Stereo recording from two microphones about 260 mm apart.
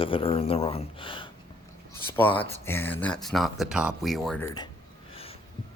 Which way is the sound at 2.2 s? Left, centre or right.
Centre.